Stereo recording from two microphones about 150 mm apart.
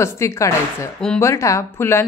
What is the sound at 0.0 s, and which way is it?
A woman's voice, 20° left (ahead or behind).